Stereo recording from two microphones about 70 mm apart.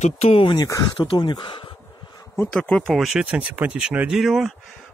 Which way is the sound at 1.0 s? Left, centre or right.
Left.